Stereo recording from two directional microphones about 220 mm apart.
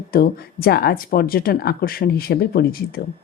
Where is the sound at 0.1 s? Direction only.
45° left (ahead or behind).